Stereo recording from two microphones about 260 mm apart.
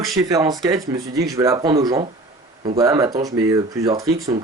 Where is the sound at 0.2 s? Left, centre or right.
Centre.